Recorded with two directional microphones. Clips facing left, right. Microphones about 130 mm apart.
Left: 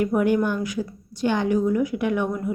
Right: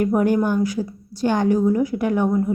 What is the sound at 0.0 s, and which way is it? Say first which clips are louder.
A woman's voice: right 2 dB; 40° right (ahead or behind).